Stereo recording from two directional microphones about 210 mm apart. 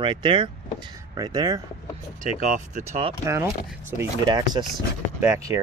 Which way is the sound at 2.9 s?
25° right (ahead or behind).